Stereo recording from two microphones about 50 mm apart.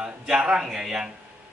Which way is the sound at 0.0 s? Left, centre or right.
Centre.